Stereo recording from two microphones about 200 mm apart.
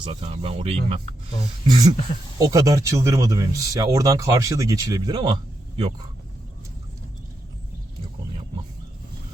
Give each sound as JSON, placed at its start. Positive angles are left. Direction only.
{"t": 0.0, "sound": "speech", "side_deg": -30}